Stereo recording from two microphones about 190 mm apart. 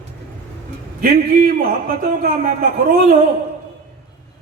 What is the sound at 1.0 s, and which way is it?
A man's voice, 45° right (ahead or behind).